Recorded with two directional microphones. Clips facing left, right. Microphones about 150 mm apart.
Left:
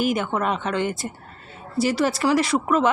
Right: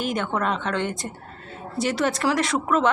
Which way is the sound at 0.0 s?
5° left (ahead or behind).